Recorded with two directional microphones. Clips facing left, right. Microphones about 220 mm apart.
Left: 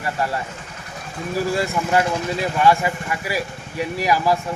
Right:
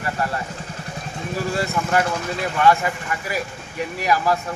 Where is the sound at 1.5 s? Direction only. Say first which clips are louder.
Even; 10° left (ahead or behind).